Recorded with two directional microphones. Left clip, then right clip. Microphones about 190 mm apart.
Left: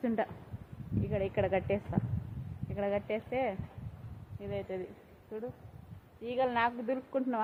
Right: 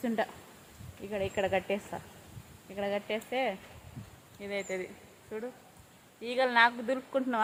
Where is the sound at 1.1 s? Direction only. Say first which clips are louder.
Right 1 dB; 10° left (ahead or behind).